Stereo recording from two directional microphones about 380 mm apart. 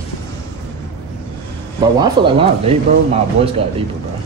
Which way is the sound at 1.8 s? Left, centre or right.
Centre.